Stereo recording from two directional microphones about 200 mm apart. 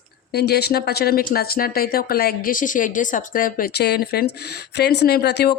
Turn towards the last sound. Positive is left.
turn(degrees=55)  # may be behind; listen again after turning